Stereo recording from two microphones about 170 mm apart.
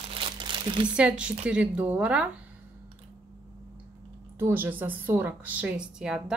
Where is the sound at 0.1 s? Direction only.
30° right (ahead or behind).